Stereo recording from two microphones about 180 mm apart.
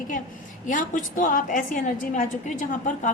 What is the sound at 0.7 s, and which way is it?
A woman's voice, 45° left (ahead or behind).